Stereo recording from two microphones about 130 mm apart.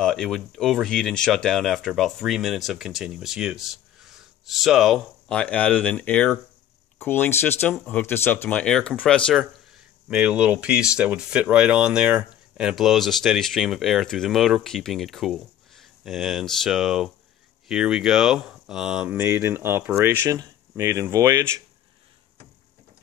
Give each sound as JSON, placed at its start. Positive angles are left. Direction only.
{"t": 0.0, "sound": "speech", "side_deg": 5}
{"t": 10.0, "sound": "speech", "side_deg": -10}
{"t": 19.0, "sound": "speech", "side_deg": -20}